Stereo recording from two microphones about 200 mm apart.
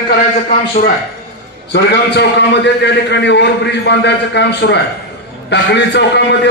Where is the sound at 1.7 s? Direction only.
60° left (ahead or behind).